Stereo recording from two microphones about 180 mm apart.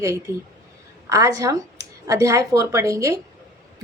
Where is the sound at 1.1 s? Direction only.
20° right (ahead or behind).